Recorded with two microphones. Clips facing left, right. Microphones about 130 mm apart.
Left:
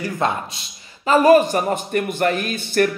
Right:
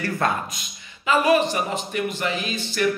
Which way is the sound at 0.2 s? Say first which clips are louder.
Left 2 dB; 20° left (ahead or behind).